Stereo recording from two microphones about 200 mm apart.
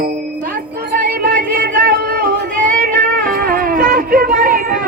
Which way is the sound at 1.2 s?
45° right (ahead or behind).